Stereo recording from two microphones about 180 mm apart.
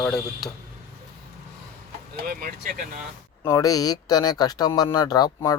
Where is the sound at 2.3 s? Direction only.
55° right (ahead or behind).